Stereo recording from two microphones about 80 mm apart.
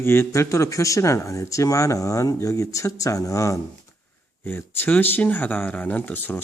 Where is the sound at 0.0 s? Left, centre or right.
Left.